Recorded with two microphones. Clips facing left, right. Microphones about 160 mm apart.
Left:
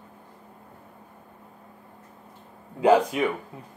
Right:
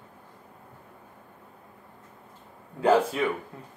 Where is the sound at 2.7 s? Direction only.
15° left (ahead or behind).